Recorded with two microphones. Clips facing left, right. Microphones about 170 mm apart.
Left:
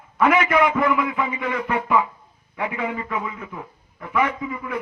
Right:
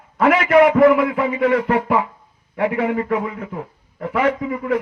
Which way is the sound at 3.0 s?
50° right (ahead or behind).